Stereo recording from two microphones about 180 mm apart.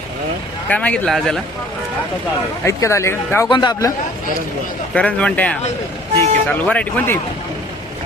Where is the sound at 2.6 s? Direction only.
15° left (ahead or behind).